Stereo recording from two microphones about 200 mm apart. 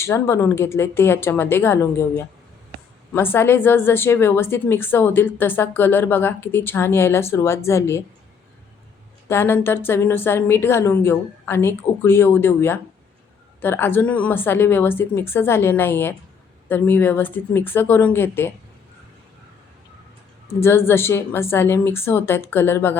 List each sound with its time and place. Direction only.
0.0 s a woman's voice: 15° left (ahead or behind)
9.3 s a woman's voice: 10° left (ahead or behind)
20.6 s a woman's voice: 10° left (ahead or behind)